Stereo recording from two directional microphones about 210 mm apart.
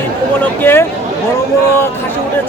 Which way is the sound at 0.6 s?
10° left (ahead or behind).